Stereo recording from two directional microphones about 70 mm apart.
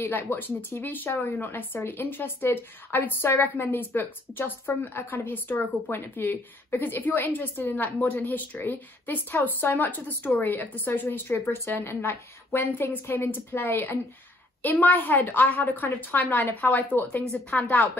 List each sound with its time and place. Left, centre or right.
0.0 s a woman's voice: left
1.3 s a woman's voice: left
1.6 s a woman's voice: left